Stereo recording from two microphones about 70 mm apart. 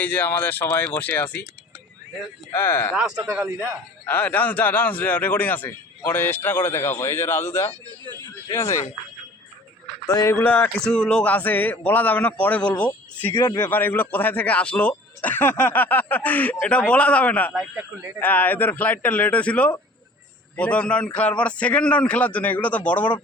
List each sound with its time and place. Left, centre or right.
0.0 s a man's voice: left
2.5 s speech: left
2.9 s speech: centre
4.0 s a man's voice: left
10.1 s speech: left
10.4 s a man's voice: left
10.8 s a man's voice: centre
17.5 s speech: centre
18.2 s a man's voice: left